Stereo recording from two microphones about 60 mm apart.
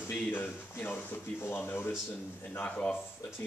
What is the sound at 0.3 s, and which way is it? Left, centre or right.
Speech, left.